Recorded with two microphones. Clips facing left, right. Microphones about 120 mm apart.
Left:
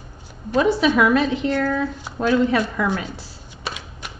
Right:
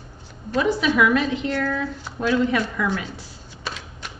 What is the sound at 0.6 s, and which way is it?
A woman's voice, 40° left (ahead or behind).